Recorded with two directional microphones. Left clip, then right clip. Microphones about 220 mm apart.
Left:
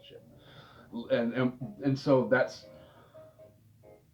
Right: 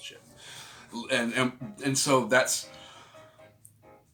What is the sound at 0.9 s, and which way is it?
Speech, 20° right (ahead or behind).